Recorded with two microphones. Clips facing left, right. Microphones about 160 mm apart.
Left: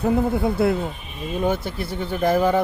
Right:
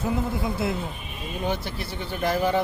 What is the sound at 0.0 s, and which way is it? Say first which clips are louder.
Speech: left 7 dB; 60° left (ahead or behind).